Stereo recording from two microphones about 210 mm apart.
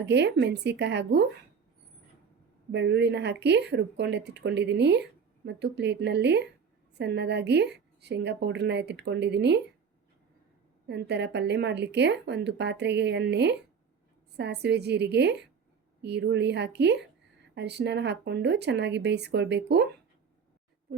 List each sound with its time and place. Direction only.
0.0 s a woman's voice: 55° right (ahead or behind)
2.7 s a woman's voice: 55° right (ahead or behind)
10.8 s a woman's voice: 55° right (ahead or behind)